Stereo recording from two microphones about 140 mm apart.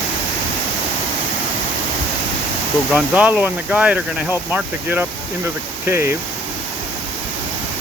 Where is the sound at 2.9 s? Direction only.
10° right (ahead or behind).